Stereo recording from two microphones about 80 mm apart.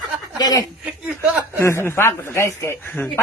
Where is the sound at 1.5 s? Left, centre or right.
Left.